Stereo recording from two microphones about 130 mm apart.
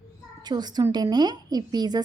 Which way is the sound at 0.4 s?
35° right (ahead or behind).